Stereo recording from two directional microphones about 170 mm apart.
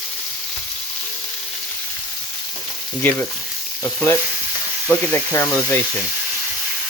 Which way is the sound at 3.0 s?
10° left (ahead or behind).